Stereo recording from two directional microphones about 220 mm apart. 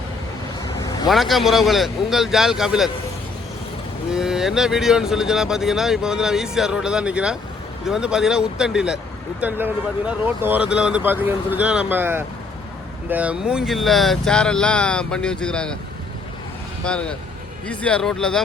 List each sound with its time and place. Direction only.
0.6 s vehicle: 15° left (ahead or behind)
1.0 s speech: centre (ahead or behind)
4.1 s speech: 5° right (ahead or behind)
16.8 s speech: 5° left (ahead or behind)